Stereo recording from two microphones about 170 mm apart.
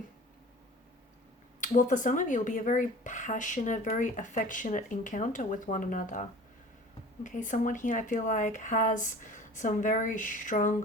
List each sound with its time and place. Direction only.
1.6 s speech: 50° left (ahead or behind)
7.3 s speech: 50° left (ahead or behind)